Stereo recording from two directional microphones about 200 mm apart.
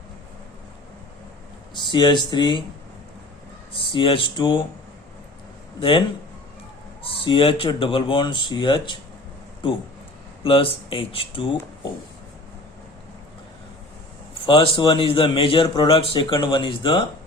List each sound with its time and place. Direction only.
1.7 s a man's voice: 25° left (ahead or behind)
3.7 s a man's voice: 25° left (ahead or behind)
7.0 s a man's voice: 25° left (ahead or behind)
10.4 s a man's voice: 25° left (ahead or behind)
14.4 s a man's voice: 25° left (ahead or behind)